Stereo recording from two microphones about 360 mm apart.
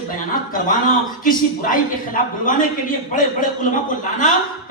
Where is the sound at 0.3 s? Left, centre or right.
Left.